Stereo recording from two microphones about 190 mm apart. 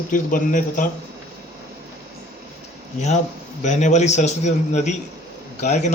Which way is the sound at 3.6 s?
40° left (ahead or behind).